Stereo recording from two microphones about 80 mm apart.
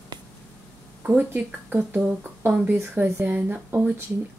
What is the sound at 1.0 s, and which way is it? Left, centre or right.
Speech, right.